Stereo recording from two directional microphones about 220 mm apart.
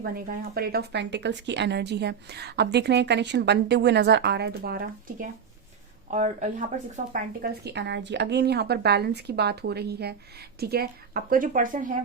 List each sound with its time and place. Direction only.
0.0 s speech: 45° right (ahead or behind)